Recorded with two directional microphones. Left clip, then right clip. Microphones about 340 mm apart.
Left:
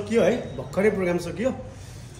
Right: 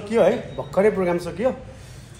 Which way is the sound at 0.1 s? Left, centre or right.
Centre.